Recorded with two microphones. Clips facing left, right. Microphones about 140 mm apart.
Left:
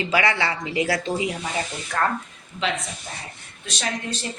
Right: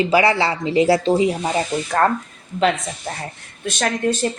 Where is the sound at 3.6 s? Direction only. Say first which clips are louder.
Right 9 dB; 55° right (ahead or behind).